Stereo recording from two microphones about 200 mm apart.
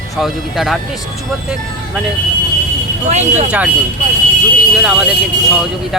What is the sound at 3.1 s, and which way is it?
Speech, 35° right (ahead or behind).